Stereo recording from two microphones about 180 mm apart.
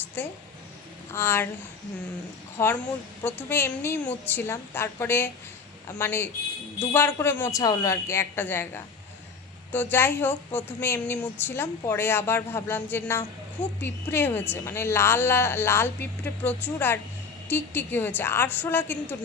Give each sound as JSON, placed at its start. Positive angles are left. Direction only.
{"t": 0.2, "sound": "a woman's voice", "side_deg": 10}
{"t": 2.6, "sound": "a woman's voice", "side_deg": 15}